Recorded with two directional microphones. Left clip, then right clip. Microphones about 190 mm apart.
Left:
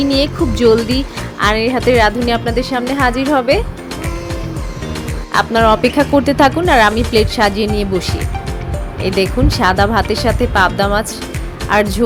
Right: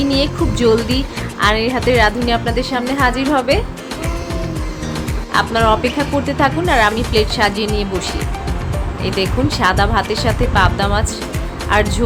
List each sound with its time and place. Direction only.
0.0 s speech: 30° left (ahead or behind)
5.3 s speech: 30° left (ahead or behind)